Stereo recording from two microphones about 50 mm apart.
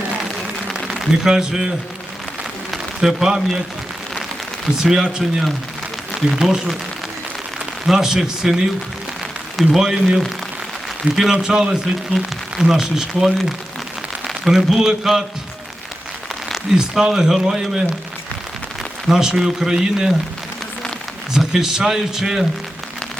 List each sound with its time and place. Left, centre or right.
0.9 s a man's voice: centre
3.0 s a man's voice: centre
4.8 s a man's voice: centre
7.9 s a man's voice: centre
9.7 s a man's voice: centre
14.4 s a man's voice: centre
16.7 s a man's voice: centre
19.0 s a man's voice: centre
21.3 s a man's voice: centre